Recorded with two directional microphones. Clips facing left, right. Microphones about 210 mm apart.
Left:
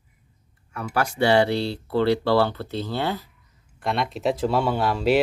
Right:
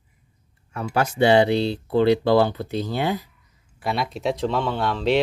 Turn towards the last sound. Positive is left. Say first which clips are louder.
# left 1 dB
turn(degrees=5)  # may be behind; listen again after turning